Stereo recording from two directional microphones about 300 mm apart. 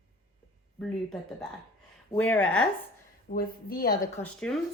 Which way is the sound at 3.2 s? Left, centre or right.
Left.